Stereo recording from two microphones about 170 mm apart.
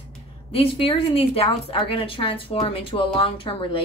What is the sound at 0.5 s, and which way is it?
Speech, 35° left (ahead or behind).